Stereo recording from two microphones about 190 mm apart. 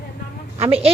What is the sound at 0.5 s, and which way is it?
Speech, 35° right (ahead or behind).